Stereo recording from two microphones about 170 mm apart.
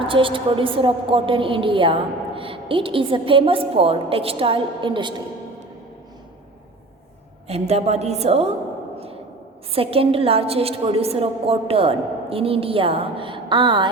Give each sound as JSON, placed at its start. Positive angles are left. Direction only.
{"t": 0.0, "sound": "a woman's voice", "side_deg": -30}
{"t": 7.4, "sound": "a woman's voice", "side_deg": -40}
{"t": 9.7, "sound": "a woman's voice", "side_deg": -35}